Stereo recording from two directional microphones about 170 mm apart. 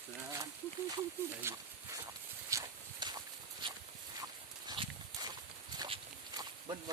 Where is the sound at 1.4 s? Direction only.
15° right (ahead or behind).